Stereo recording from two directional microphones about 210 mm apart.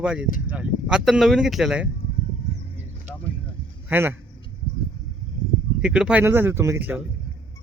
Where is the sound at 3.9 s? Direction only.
10° right (ahead or behind).